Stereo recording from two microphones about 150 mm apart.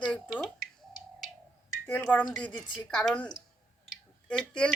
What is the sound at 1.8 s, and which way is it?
Speech, 10° left (ahead or behind).